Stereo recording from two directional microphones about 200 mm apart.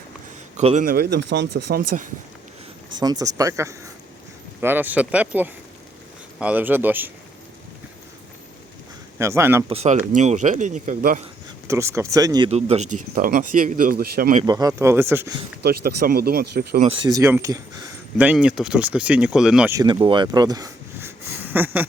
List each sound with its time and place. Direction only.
0.5 s a man's voice: 35° right (ahead or behind)
0.9 s speech: 50° right (ahead or behind)
2.9 s speech: 20° right (ahead or behind)
9.1 s speech: 15° right (ahead or behind)
9.6 s speech: 30° right (ahead or behind)
11.7 s speech: 15° right (ahead or behind)
12.5 s speech: 30° right (ahead or behind)
13.0 s speech: 45° right (ahead or behind)
14.4 s speech: 20° right (ahead or behind)
15.6 s speech: 55° right (ahead or behind)
16.8 s speech: 25° right (ahead or behind); by 19.7 s 5° right (ahead or behind)
19.7 s a sound: 20° right (ahead or behind)